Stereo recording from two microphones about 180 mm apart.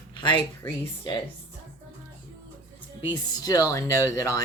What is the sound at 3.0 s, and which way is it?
Speech, 25° left (ahead or behind).